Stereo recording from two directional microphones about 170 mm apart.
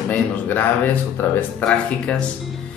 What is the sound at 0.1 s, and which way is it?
Speech, 10° left (ahead or behind).